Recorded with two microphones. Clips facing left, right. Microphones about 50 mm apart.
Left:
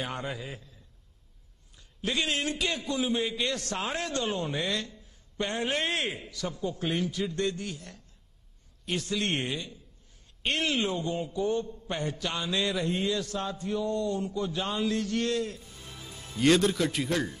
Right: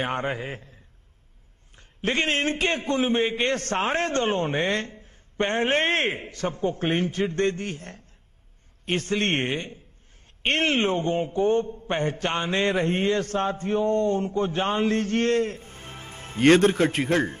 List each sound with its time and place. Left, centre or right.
0.0 s a man's voice: right
1.8 s a man's voice: right